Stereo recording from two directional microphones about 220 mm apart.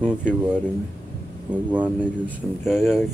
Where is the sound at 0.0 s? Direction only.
5° right (ahead or behind).